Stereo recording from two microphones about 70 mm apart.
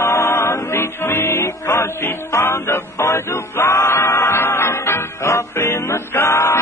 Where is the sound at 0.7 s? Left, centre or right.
Left.